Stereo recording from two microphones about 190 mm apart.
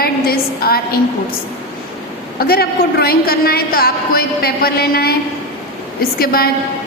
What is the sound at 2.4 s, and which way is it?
A woman's voice, 55° left (ahead or behind).